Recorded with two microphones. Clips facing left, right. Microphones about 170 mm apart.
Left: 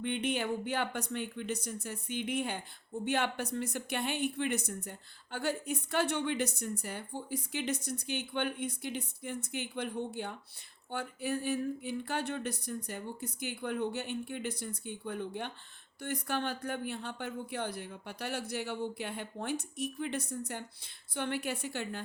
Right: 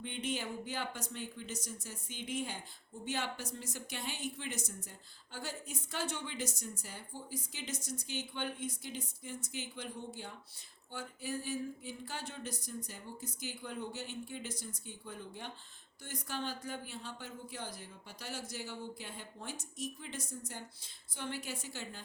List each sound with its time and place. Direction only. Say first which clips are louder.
0.0 s speech: left 6 dB; 65° left (ahead or behind)